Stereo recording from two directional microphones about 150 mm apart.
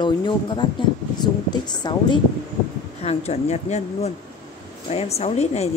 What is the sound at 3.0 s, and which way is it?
A woman's voice, 45° left (ahead or behind).